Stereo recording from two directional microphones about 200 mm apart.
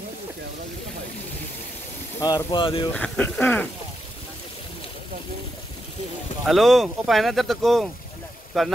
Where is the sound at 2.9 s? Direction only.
5° left (ahead or behind).